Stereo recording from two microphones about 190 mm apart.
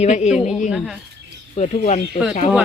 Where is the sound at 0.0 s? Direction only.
35° left (ahead or behind).